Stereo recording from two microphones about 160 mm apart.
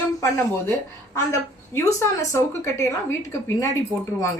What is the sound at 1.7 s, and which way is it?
Speech, 15° left (ahead or behind).